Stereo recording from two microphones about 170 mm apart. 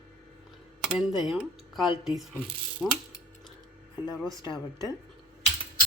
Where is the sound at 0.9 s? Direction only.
Centre (ahead or behind).